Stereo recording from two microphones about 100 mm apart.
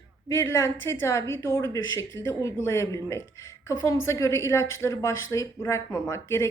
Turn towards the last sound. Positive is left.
turn(degrees=30)  # may be behind; listen again after turning